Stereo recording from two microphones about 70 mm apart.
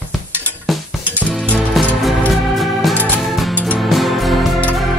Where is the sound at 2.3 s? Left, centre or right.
Centre.